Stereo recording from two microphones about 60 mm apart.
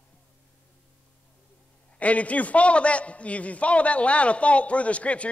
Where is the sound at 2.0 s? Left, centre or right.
Left.